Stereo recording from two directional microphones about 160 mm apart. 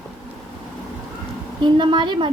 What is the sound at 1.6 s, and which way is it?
Speech, 30° right (ahead or behind).